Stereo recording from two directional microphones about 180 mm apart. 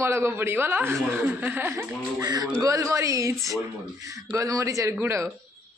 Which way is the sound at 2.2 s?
20° right (ahead or behind).